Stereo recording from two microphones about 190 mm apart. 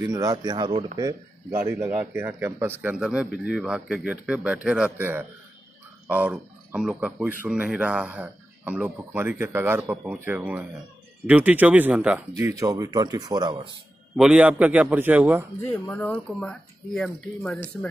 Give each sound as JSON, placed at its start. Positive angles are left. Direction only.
{"t": 0.0, "sound": "speech", "side_deg": -20}
{"t": 12.4, "sound": "speech", "side_deg": -15}
{"t": 14.1, "sound": "speech", "side_deg": -5}
{"t": 15.7, "sound": "speech", "side_deg": 10}